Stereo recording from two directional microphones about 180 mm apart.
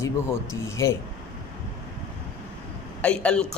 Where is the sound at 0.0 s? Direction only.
15° left (ahead or behind).